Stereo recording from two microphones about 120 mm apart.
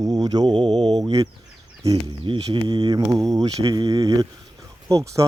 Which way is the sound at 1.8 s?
25° right (ahead or behind).